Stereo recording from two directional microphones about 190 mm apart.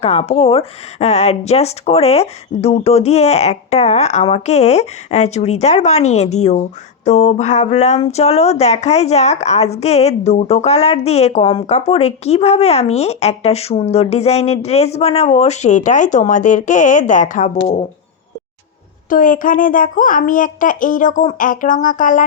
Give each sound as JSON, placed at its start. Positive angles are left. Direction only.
{"t": 0.0, "sound": "speech", "side_deg": 30}
{"t": 19.1, "sound": "speech", "side_deg": 45}